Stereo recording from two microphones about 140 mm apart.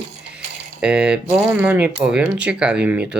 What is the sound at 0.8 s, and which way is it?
Speech, 5° right (ahead or behind).